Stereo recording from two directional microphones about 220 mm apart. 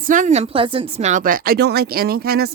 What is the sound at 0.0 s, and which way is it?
Speech, 35° right (ahead or behind).